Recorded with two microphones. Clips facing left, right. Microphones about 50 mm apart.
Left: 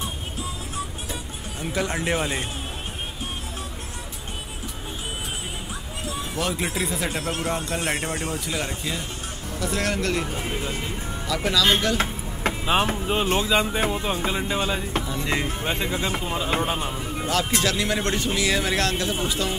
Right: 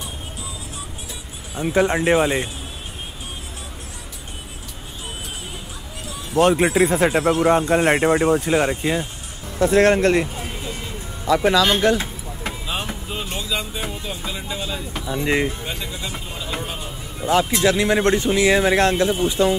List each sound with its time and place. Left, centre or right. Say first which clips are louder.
1.6 s speech: right 8 dB; right
6.3 s speech: right 12 dB; right
10.3 s vehicle: left 2 dB; left
11.2 s speech: right 6 dB; right
12.6 s music: left 8 dB; left
15.0 s speech: right 5 dB; right
15.6 s music: left 4 dB; left
16.5 s a sound: left 4 dB; left
17.3 s speech: right 7 dB; right